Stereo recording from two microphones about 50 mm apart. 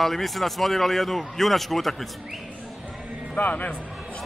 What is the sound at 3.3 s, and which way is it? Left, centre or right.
Speech, left.